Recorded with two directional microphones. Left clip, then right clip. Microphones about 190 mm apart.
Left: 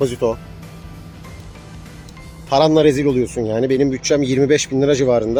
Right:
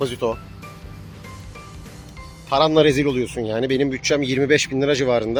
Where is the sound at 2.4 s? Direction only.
20° left (ahead or behind).